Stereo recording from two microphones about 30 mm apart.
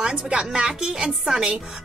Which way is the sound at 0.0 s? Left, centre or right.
Right.